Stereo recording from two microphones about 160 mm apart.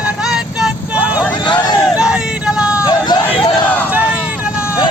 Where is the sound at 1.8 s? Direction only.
5° right (ahead or behind).